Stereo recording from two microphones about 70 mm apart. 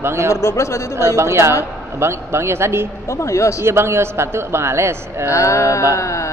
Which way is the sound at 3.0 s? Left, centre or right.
Left.